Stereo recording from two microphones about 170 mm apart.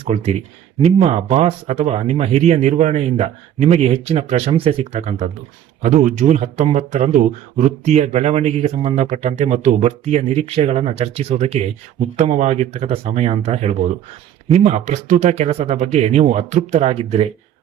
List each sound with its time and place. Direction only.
0.0 s speech: 40° right (ahead or behind)